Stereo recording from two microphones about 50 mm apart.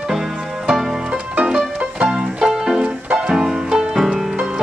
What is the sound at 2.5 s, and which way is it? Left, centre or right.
Organ, centre.